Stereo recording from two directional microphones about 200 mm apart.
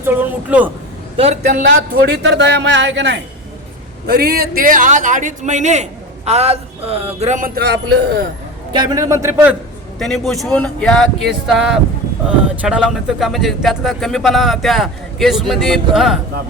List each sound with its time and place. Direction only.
0.0 s a man's voice: 10° right (ahead or behind)
1.1 s a man's voice: 30° right (ahead or behind)
1.6 s speech: 55° right (ahead or behind)
4.0 s a man's voice: 50° right (ahead or behind)
8.7 s a man's voice: 20° right (ahead or behind)
10.0 s speech: centre (ahead or behind)